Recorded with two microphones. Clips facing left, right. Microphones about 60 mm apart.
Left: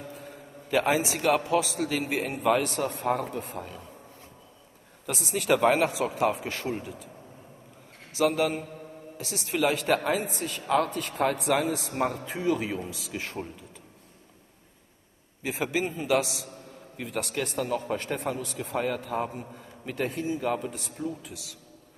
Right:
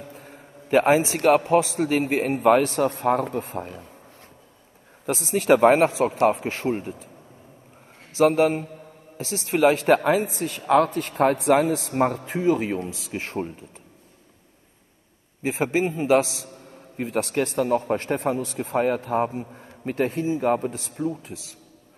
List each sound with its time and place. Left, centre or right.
0.1 s a sound: right
1.4 s a man's voice: right
5.0 s a man's voice: right
6.4 s a man's voice: right
8.2 s a man's voice: right
15.4 s a man's voice: right